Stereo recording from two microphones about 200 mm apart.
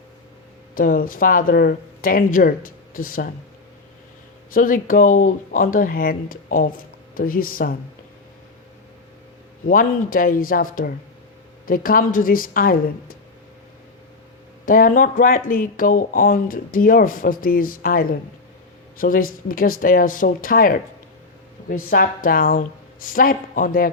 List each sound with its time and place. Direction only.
0.8 s speech: 45° left (ahead or behind)
4.5 s speech: 45° left (ahead or behind)
9.6 s speech: 45° left (ahead or behind)
14.6 s speech: 45° left (ahead or behind)